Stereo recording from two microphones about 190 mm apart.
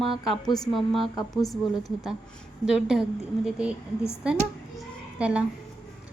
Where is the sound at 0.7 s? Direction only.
Centre (ahead or behind).